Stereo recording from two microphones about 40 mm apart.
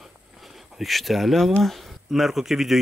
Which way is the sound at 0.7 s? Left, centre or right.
Centre.